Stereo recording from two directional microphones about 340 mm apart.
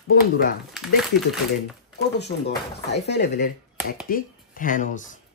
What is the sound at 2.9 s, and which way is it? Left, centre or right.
Speech, left.